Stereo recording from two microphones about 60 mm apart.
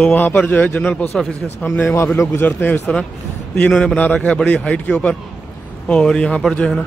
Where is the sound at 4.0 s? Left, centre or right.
Left.